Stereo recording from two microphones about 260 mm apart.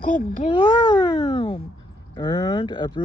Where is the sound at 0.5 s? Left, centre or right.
Left.